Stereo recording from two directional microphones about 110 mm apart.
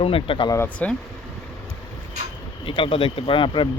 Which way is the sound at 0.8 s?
15° left (ahead or behind).